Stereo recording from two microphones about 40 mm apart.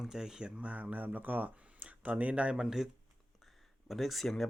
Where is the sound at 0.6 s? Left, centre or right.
Right.